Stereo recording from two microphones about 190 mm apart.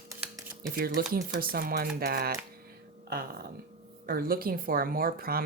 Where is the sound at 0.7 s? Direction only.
50° right (ahead or behind).